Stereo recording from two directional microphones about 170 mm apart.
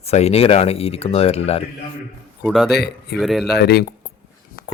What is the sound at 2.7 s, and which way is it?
Speech, 75° left (ahead or behind).